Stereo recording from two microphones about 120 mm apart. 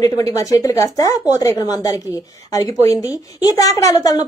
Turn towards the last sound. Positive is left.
turn(degrees=30)  # may be behind; listen again after turning